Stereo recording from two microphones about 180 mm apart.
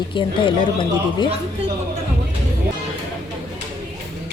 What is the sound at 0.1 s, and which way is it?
Speech, 25° left (ahead or behind).